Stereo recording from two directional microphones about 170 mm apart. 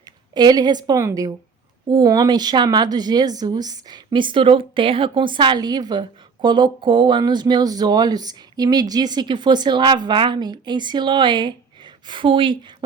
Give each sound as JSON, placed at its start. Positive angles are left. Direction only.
{"t": 0.0, "sound": "a woman's voice", "side_deg": -25}